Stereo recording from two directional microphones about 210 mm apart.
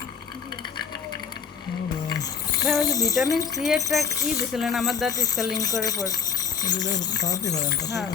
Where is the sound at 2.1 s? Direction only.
20° left (ahead or behind).